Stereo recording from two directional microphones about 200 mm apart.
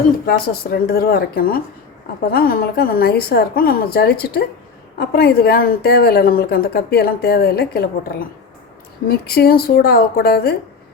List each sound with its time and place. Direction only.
0.3 s a woman's voice: 50° left (ahead or behind)
9.0 s a woman's voice: 50° left (ahead or behind)